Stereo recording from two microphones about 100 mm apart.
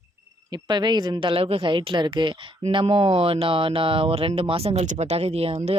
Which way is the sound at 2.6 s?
65° right (ahead or behind).